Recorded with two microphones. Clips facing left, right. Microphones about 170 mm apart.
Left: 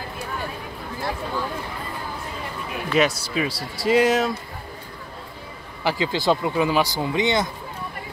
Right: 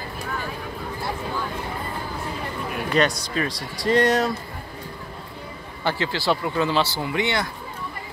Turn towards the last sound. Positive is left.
turn(degrees=20)  # may be behind; listen again after turning